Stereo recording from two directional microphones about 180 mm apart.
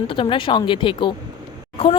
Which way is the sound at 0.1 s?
30° left (ahead or behind).